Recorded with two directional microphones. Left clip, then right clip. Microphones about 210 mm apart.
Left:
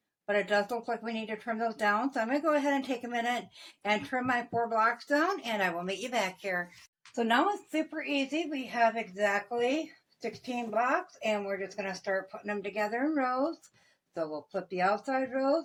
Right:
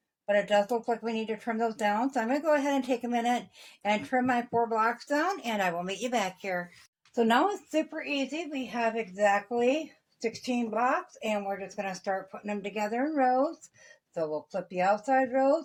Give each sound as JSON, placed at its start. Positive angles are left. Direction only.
{"t": 0.3, "sound": "speech", "side_deg": -30}
{"t": 7.2, "sound": "speech", "side_deg": -55}
{"t": 14.7, "sound": "speech", "side_deg": -30}